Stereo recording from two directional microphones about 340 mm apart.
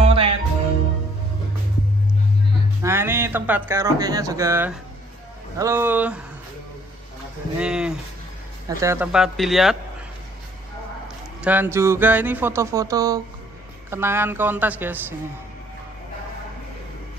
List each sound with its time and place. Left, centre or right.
0.0 s music: centre
2.8 s a woman's voice: centre
7.5 s a woman's voice: centre
11.4 s a sound: centre
13.8 s a woman's voice: centre